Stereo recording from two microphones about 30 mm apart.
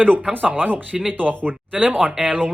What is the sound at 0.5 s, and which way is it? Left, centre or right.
Speech, right.